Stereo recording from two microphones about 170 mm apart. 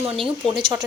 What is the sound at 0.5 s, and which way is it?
Speech, 30° right (ahead or behind).